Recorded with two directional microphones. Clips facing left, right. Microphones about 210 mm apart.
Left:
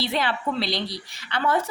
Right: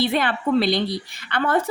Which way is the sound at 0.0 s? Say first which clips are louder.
Right 4 dB; 55° right (ahead or behind).